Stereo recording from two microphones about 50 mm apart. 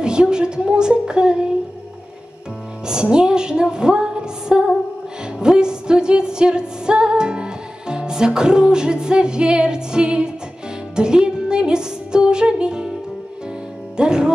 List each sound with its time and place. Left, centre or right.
0.0 s music: centre
2.9 s music: centre
13.9 s music: centre